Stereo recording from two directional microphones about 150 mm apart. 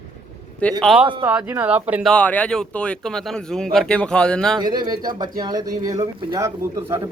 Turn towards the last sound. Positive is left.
turn(degrees=-20)  # may be behind; listen again after turning